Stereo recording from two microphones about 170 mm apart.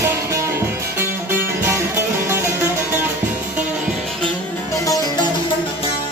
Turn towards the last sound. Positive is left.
turn(degrees=20)  # may be behind; listen again after turning